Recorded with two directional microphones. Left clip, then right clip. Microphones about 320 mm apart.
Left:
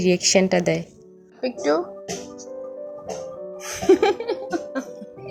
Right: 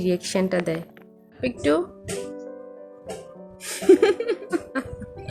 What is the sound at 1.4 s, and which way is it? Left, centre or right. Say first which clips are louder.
Speech: left 1 dB; centre.